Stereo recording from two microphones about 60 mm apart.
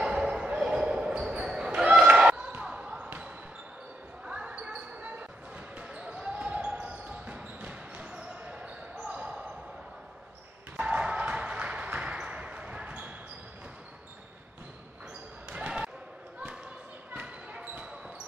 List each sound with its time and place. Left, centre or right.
0.0 s basketball bounce: centre
4.3 s basketball bounce: centre
10.8 s a sound: centre
15.5 s basketball bounce: centre
17.1 s basketball bounce: right